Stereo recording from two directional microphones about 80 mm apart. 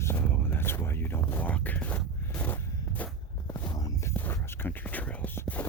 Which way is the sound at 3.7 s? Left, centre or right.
Left.